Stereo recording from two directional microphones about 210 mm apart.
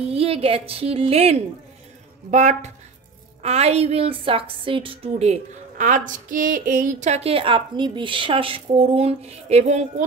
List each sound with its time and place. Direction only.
0.1 s a woman's voice: 30° right (ahead or behind)